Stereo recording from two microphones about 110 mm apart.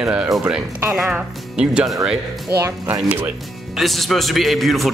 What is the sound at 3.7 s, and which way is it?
Speech, centre (ahead or behind).